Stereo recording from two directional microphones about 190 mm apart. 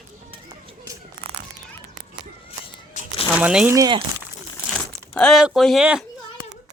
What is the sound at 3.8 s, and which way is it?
Speech, 20° right (ahead or behind).